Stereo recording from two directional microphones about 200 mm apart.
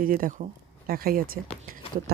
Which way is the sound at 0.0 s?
45° right (ahead or behind).